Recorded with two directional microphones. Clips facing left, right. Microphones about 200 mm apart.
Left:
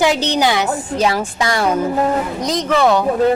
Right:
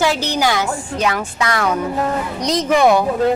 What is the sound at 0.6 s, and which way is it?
Speech, 30° left (ahead or behind).